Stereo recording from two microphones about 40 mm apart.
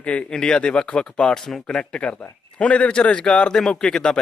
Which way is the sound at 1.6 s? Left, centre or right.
Left.